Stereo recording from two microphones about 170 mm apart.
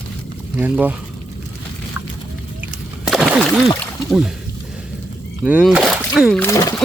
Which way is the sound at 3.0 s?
Centre (ahead or behind).